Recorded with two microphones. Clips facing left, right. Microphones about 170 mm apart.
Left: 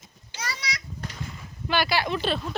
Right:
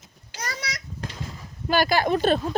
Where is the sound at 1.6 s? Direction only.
45° right (ahead or behind).